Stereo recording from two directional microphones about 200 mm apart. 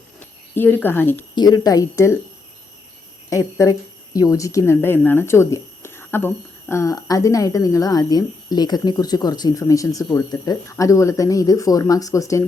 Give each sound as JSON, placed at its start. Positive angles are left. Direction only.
{"t": 0.2, "sound": "speech", "side_deg": 10}
{"t": 3.2, "sound": "speech", "side_deg": 15}